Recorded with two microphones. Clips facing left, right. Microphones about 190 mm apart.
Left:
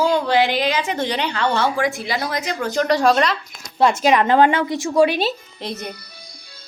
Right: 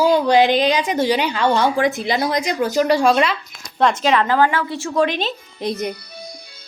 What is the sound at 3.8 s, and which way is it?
A woman's voice, 10° left (ahead or behind).